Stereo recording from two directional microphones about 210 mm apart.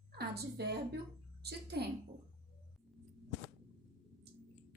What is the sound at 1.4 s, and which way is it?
Speech, 50° right (ahead or behind).